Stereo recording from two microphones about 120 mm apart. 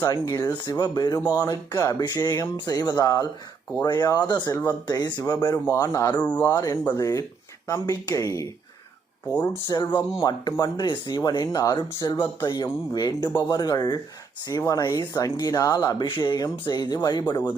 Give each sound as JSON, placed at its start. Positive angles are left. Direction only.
{"t": 0.0, "sound": "speech", "side_deg": 30}
{"t": 6.1, "sound": "speech", "side_deg": 15}
{"t": 6.5, "sound": "speech", "side_deg": 30}
{"t": 9.6, "sound": "speech", "side_deg": 40}